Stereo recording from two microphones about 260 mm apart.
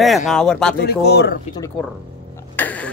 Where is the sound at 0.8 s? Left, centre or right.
Left.